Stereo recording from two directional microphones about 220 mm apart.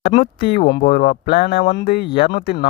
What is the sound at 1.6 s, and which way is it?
Speech, 35° left (ahead or behind).